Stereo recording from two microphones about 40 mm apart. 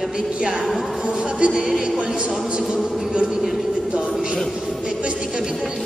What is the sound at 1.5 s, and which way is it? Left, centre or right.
Music, centre.